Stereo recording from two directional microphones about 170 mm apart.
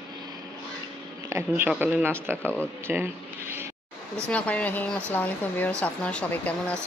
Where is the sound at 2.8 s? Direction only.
15° right (ahead or behind).